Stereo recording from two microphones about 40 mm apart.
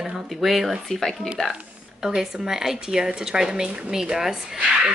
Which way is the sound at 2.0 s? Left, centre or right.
Centre.